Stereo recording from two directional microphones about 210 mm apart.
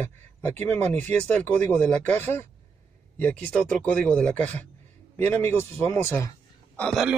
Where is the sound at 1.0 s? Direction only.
5° left (ahead or behind).